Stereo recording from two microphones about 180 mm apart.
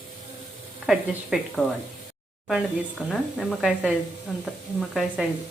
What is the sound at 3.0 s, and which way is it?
Speech, centre (ahead or behind).